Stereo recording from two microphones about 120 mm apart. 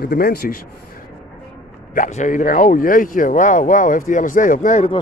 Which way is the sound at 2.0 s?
90° left.